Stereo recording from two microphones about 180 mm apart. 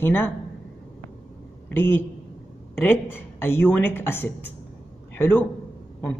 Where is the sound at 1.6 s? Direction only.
10° left (ahead or behind).